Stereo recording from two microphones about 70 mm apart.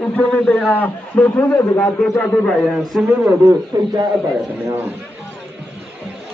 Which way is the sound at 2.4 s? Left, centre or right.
Centre.